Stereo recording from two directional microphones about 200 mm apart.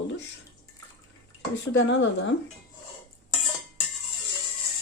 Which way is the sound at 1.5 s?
60° left (ahead or behind).